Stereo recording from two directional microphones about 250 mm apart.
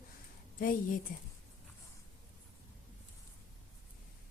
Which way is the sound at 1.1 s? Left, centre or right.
Left.